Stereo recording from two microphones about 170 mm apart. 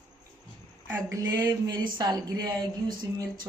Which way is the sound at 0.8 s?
15° right (ahead or behind).